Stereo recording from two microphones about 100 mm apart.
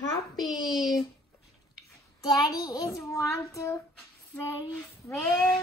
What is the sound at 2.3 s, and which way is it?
Child singing, 45° left (ahead or behind).